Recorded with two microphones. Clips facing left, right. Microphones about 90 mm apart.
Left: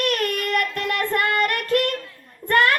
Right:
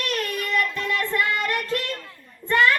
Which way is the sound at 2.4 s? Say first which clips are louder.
Left 1 dB; 55° left (ahead or behind).